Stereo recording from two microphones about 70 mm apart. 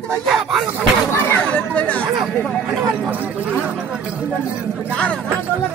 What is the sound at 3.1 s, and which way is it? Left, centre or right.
Speech, right.